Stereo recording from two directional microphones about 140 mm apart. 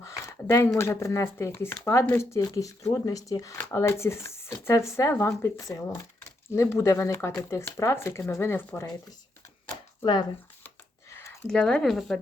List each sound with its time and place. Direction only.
0.0 s speech: 20° left (ahead or behind)
9.6 s chopping: 30° left (ahead or behind)
11.4 s speech: 5° left (ahead or behind)